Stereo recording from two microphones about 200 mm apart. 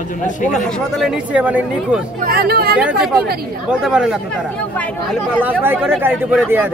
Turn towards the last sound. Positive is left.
turn(degrees=-5)  # may be behind; listen again after turning